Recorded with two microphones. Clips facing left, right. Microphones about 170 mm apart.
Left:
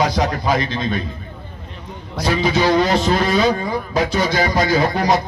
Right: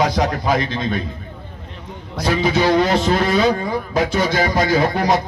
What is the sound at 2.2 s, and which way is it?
Speech, 55° right (ahead or behind).